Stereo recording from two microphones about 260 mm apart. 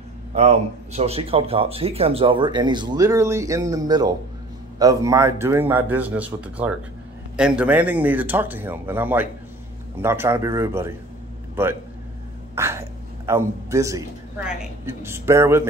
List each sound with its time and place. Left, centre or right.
0.3 s a man's voice: right; by 11.0 s centre
12.5 s a man's voice: centre